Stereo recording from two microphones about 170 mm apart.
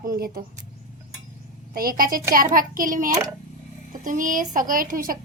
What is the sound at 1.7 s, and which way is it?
A woman's voice, 60° right (ahead or behind).